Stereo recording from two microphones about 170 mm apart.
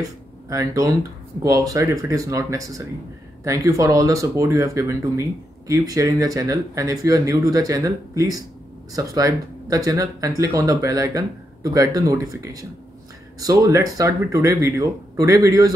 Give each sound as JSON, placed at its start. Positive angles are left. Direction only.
{"t": 0.5, "sound": "speech", "side_deg": -20}